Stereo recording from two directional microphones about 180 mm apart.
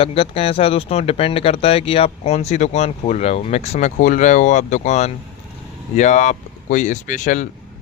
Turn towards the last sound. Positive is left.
turn(degrees=45)  # may be behind; listen again after turning